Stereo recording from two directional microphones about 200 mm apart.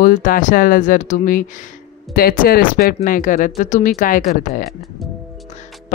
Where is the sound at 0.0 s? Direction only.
45° left (ahead or behind).